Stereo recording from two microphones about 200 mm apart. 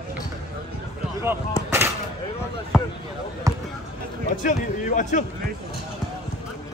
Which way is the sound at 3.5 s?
15° right (ahead or behind).